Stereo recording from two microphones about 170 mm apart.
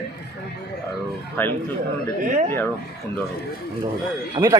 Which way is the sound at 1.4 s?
10° left (ahead or behind).